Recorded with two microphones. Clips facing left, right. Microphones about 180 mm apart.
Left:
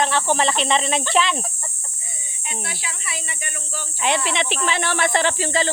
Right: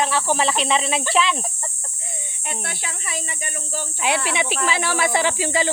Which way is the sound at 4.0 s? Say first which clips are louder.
Left 1 dB; 10° right (ahead or behind).